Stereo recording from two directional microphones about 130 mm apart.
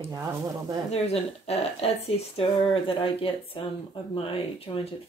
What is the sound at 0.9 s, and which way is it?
Speech, 55° left (ahead or behind).